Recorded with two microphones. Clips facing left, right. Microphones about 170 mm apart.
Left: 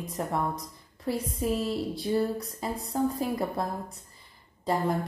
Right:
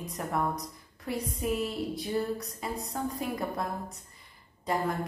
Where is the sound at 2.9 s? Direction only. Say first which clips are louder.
Left 8 dB; 35° left (ahead or behind).